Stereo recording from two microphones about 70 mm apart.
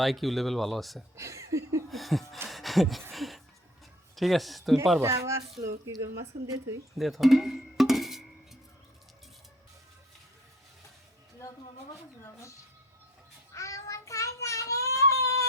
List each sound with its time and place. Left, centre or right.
0.0 s speech: centre
1.1 s speech: right
1.9 s speech: centre
3.1 s a sound: centre
4.1 s speech: centre
4.9 s speech: right
7.0 s music: centre
13.5 s child singing: left